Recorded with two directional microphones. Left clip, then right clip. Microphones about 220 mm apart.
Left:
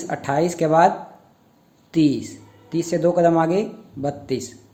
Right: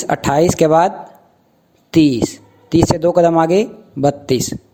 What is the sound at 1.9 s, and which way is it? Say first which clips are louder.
A woman's voice: right 7 dB; 45° right (ahead or behind).